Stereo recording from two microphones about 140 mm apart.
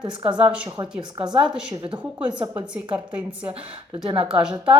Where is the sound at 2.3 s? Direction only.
30° right (ahead or behind).